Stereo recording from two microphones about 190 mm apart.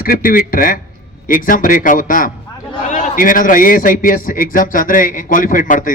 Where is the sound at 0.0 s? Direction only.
50° left (ahead or behind).